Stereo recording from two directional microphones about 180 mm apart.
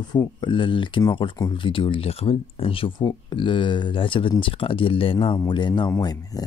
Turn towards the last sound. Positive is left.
turn(degrees=20)  # may be behind; listen again after turning